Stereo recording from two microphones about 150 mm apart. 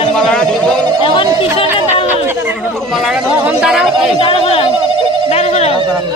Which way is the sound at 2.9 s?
5° right (ahead or behind).